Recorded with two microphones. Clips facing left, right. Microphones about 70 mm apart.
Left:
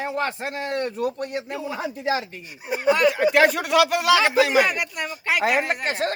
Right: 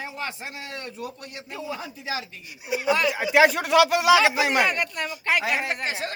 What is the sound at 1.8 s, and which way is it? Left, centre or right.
Speech, left.